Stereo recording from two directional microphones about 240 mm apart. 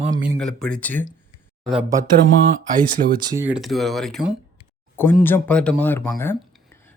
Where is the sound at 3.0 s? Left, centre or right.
Right.